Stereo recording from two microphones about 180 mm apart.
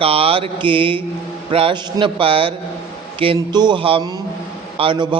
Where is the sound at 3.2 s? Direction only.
25° right (ahead or behind).